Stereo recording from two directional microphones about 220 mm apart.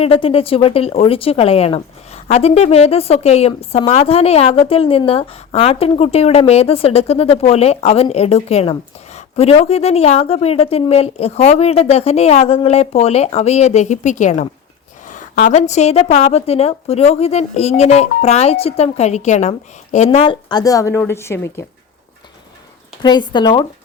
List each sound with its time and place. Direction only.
0.0 s a woman's voice: 25° left (ahead or behind)
23.0 s a woman's voice: 20° left (ahead or behind)